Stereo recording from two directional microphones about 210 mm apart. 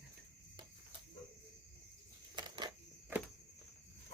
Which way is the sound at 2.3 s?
20° right (ahead or behind).